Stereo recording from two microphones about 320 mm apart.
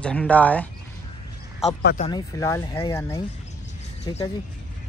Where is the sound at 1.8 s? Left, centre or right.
Left.